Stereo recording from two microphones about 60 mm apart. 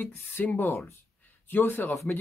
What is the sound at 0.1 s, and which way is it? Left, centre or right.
Speech, left.